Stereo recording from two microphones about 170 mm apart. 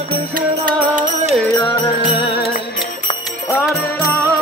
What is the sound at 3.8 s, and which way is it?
Music, 15° left (ahead or behind).